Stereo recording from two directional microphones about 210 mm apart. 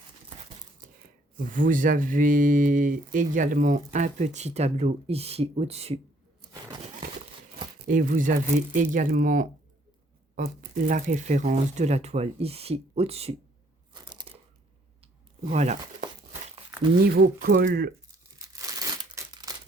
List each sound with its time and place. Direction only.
1.5 s speech: 40° right (ahead or behind)
6.4 s a sound: 20° right (ahead or behind)
7.9 s speech: 40° right (ahead or behind)
13.9 s crunch: 20° right (ahead or behind)
15.4 s speech: 35° right (ahead or behind)
17.1 s speech: 45° right (ahead or behind)
18.3 s crumpling: 15° right (ahead or behind)